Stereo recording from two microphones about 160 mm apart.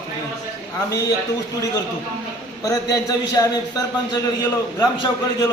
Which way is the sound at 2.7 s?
20° left (ahead or behind).